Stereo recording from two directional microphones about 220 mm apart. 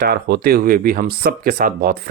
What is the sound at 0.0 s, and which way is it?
Speech, 45° right (ahead or behind).